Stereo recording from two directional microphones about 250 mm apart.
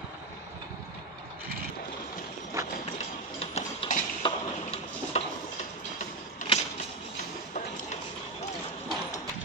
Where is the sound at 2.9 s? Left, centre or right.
Left.